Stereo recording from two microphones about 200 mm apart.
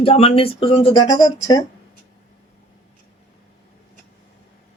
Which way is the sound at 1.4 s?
15° left (ahead or behind).